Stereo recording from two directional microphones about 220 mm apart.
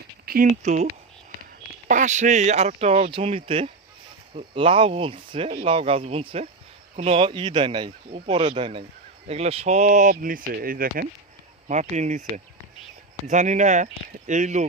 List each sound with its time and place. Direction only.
0.3 s speech: 35° right (ahead or behind)
1.9 s speech: 35° right (ahead or behind)
13.2 s speech: 30° right (ahead or behind)